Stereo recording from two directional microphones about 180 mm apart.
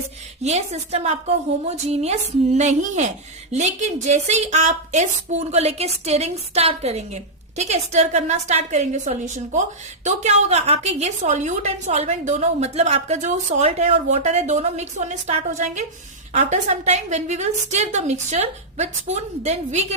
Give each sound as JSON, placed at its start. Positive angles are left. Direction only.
{"t": 0.4, "sound": "a woman's voice", "side_deg": -40}